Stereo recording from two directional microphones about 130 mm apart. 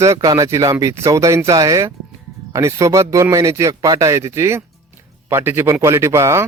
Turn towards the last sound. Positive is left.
turn(degrees=-20)  # may be behind; listen again after turning